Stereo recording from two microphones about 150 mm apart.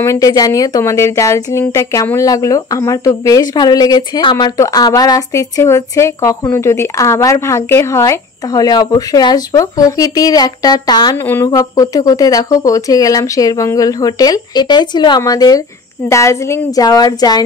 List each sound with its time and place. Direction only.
0.0 s speech: 20° left (ahead or behind)
11.1 s speech: 15° left (ahead or behind)